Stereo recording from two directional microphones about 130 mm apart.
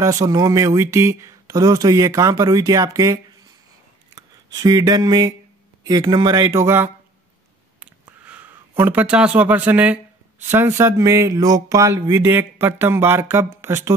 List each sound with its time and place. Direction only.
0.0 s a man's voice: 25° right (ahead or behind)
6.4 s speech: 20° right (ahead or behind)
8.2 s speech: 10° right (ahead or behind)